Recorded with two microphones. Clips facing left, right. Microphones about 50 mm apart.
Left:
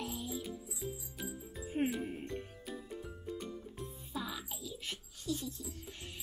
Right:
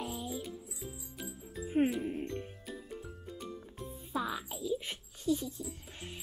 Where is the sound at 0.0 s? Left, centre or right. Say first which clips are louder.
Right 2 dB; centre.